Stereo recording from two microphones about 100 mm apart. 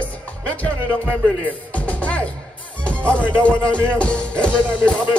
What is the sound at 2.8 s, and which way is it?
Music, 10° left (ahead or behind).